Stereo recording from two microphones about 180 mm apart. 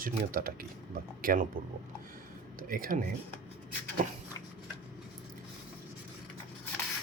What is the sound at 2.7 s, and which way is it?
Speech, 50° right (ahead or behind).